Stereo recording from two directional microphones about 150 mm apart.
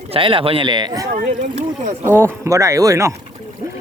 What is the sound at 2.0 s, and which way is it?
Speech, 15° right (ahead or behind).